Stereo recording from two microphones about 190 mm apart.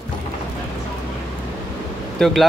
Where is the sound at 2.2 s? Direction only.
5° left (ahead or behind).